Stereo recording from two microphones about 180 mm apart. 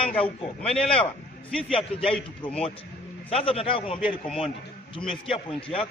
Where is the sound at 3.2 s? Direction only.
30° left (ahead or behind).